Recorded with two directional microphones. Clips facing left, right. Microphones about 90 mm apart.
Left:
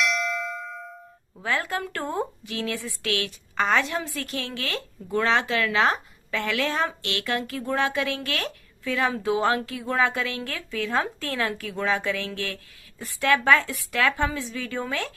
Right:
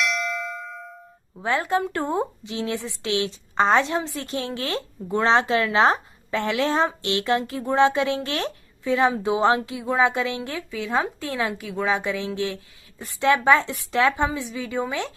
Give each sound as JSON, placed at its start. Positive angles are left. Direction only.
{"t": 0.0, "sound": "bell", "side_deg": 0}
{"t": 1.4, "sound": "a woman's voice", "side_deg": -25}